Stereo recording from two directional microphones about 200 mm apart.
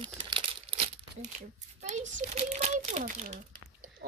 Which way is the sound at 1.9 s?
35° right (ahead or behind).